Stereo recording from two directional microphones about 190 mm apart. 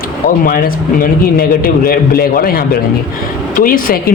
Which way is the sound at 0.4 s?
50° left (ahead or behind).